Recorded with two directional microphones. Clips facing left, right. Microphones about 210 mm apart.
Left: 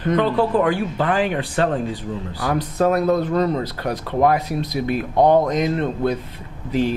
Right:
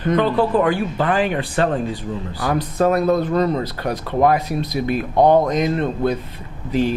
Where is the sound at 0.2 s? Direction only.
15° right (ahead or behind).